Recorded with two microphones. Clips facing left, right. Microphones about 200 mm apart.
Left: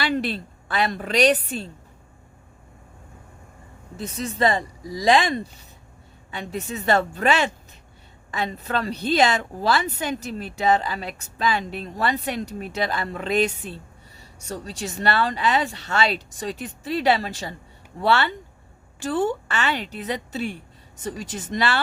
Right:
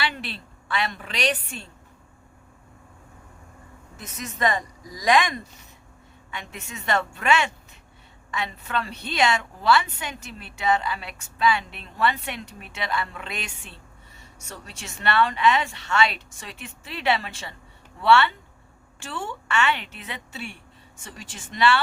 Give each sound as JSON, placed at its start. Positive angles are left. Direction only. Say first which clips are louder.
{"t": 0.0, "sound": "a woman's voice", "louder": "left 7 dB", "side_deg": 40}
{"t": 3.9, "sound": "a woman's voice", "louder": "left 8 dB", "side_deg": 30}